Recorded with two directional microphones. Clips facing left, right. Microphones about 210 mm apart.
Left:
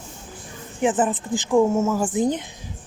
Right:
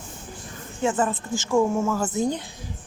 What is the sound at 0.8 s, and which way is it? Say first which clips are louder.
A woman's voice: left 3 dB; 15° left (ahead or behind).